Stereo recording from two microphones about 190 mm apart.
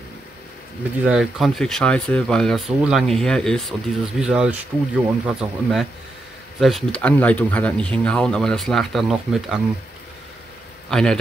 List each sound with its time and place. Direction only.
1.0 s speech: 5° right (ahead or behind)
10.9 s speech: 5° left (ahead or behind)